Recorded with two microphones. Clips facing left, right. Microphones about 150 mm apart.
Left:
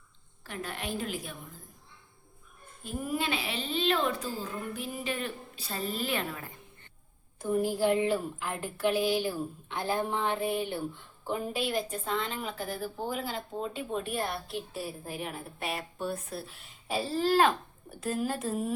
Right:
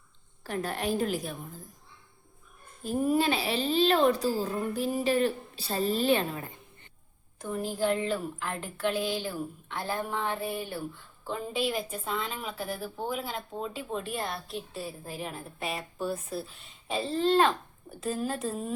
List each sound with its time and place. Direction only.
0.4 s a woman's voice: 40° right (ahead or behind)
2.8 s a woman's voice: 35° right (ahead or behind)
7.3 s speech: 10° left (ahead or behind)
11.5 s a woman's voice: centre (ahead or behind)